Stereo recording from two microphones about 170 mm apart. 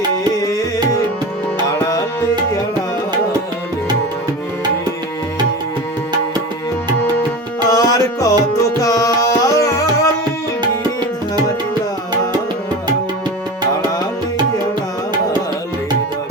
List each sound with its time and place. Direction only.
7.7 s music: 20° left (ahead or behind)
8.8 s tabla: 20° left (ahead or behind)